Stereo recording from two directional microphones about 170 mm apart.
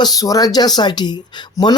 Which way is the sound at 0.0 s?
20° left (ahead or behind).